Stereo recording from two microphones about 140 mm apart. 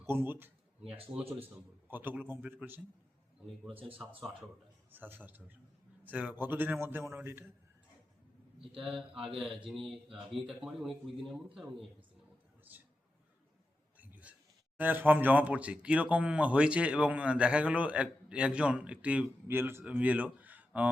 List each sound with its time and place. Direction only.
0.0 s speech: 15° right (ahead or behind)
4.9 s speech: 15° right (ahead or behind)
8.8 s speech: 5° right (ahead or behind)
14.0 s a sound: 10° right (ahead or behind)
14.8 s speech: 15° right (ahead or behind)